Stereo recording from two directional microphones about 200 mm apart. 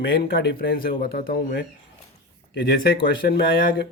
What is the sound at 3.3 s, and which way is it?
Speech, 50° left (ahead or behind).